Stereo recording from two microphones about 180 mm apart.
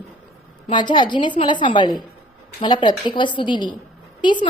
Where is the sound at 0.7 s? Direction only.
25° left (ahead or behind).